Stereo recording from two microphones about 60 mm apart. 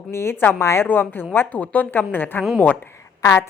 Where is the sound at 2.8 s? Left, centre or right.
Left.